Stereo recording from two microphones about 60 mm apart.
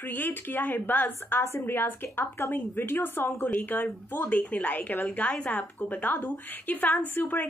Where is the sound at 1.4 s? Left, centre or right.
Left.